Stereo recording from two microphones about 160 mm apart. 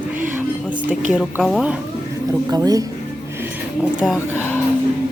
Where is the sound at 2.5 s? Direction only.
25° right (ahead or behind).